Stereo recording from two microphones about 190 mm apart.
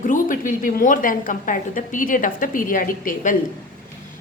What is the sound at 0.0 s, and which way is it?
A woman's voice, 45° left (ahead or behind).